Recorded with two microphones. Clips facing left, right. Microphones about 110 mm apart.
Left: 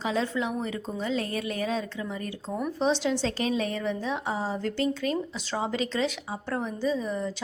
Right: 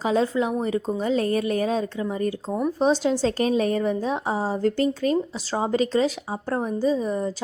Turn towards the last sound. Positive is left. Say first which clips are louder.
# right 5 dB
turn(degrees=-40)  # may be behind; listen again after turning